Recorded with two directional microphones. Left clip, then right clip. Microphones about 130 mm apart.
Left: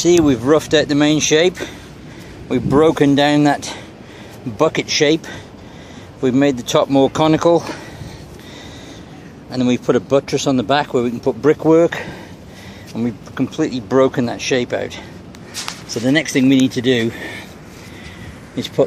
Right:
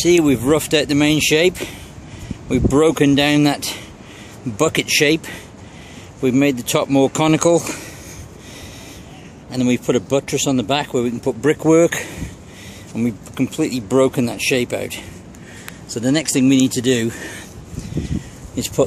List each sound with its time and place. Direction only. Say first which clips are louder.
0.0 s speech: left 1 dB; 20° right (ahead or behind); by 7.8 s 45° right (ahead or behind)
9.5 s speech: left 2 dB; 20° right (ahead or behind)
11.6 s speech: right 2 dB; 50° right (ahead or behind)
12.9 s speech: even; 30° right (ahead or behind)
16.0 s speech: left 2 dB; 15° right (ahead or behind)